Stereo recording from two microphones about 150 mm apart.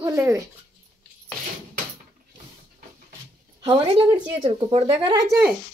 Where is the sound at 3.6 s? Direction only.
30° right (ahead or behind).